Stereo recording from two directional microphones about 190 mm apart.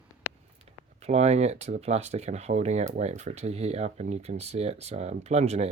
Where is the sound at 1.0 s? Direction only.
35° right (ahead or behind).